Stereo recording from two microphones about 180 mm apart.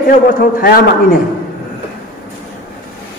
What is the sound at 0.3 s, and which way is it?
Speech, 50° left (ahead or behind).